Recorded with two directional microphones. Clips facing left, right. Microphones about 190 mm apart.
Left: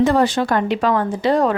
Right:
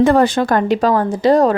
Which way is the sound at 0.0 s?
55° right (ahead or behind).